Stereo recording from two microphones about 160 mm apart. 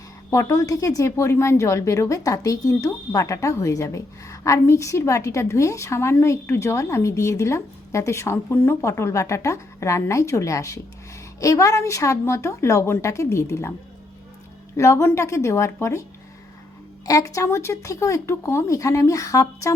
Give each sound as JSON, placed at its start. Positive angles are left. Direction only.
{"t": 0.3, "sound": "speech", "side_deg": 20}
{"t": 14.8, "sound": "a woman's voice", "side_deg": 20}
{"t": 17.1, "sound": "speech", "side_deg": 20}